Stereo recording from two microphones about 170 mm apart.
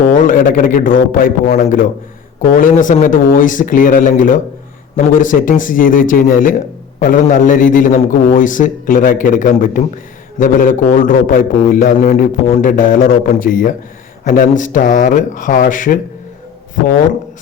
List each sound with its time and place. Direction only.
0.0 s a man's voice: 50° left (ahead or behind)